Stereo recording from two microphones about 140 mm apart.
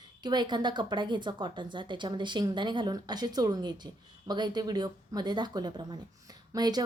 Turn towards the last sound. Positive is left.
turn(degrees=-30)  # may be behind; listen again after turning